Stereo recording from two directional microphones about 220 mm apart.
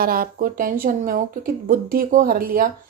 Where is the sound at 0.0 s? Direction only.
40° right (ahead or behind).